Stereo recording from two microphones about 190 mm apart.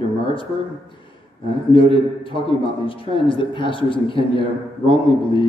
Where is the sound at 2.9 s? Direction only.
25° left (ahead or behind).